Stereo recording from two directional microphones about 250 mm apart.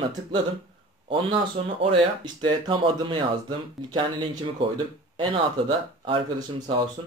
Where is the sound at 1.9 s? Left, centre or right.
Centre.